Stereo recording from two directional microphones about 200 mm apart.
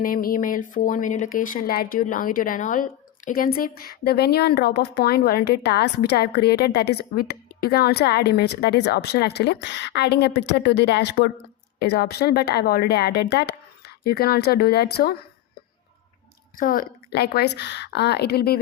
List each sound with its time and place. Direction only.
0.0 s speech: 45° left (ahead or behind)
16.6 s speech: 45° left (ahead or behind)